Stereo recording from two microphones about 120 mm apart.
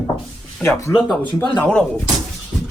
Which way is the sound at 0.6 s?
25° left (ahead or behind).